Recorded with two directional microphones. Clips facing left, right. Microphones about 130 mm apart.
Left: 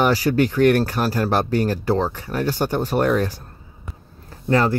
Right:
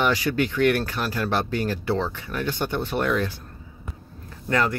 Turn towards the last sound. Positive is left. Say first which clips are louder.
# left 5 dB
turn(degrees=30)  # may be behind; listen again after turning